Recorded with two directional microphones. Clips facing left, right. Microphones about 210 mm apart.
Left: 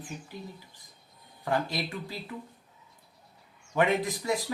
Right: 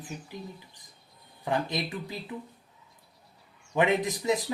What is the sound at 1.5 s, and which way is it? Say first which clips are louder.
Speech: even; 20° right (ahead or behind).